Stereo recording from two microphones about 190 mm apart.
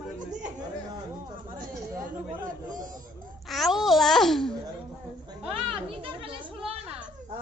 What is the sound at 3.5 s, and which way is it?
A woman's voice, centre (ahead or behind).